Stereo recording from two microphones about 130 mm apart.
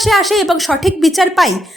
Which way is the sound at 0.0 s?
Centre (ahead or behind).